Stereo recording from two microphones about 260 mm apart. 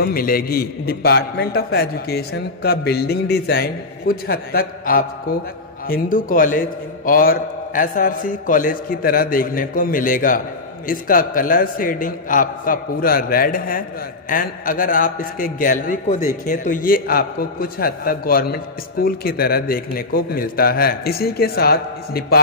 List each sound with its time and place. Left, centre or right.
0.0 s a man's voice: left